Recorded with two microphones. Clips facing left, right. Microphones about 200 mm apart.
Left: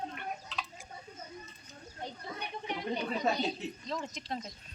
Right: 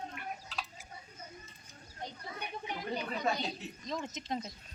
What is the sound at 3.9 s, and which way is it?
Speech, 20° right (ahead or behind).